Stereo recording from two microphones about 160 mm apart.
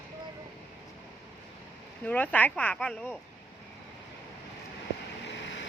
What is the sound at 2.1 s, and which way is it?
Speech, 10° left (ahead or behind).